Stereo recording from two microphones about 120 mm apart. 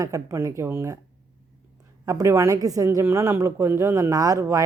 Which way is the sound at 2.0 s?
25° right (ahead or behind).